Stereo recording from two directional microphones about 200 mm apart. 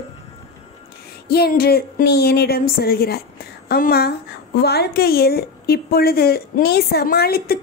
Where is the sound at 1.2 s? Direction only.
50° left (ahead or behind).